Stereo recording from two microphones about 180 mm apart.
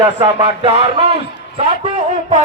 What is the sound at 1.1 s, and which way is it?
Speech, 35° right (ahead or behind).